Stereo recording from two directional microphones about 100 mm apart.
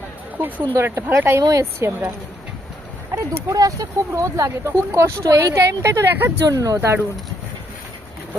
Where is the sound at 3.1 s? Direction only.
35° right (ahead or behind).